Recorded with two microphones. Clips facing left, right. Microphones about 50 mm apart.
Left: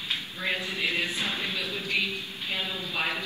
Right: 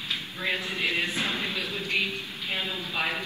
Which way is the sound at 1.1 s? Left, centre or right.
Right.